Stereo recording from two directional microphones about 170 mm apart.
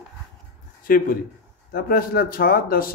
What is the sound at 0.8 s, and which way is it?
A man's voice, 55° left (ahead or behind).